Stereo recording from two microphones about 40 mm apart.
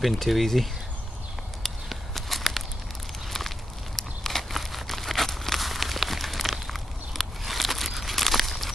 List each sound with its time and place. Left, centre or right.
0.0 s speech: centre
1.9 s a sound: centre
3.3 s walk: centre